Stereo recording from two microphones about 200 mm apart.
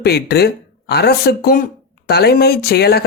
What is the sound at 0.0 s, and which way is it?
Speech, 55° left (ahead or behind).